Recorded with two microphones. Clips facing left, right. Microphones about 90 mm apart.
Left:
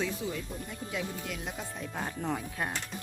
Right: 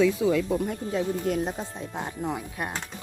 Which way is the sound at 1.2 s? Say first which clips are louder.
Right 11 dB; 40° right (ahead or behind).